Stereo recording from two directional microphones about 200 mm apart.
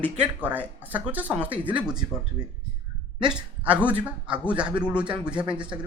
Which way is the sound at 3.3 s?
5° right (ahead or behind).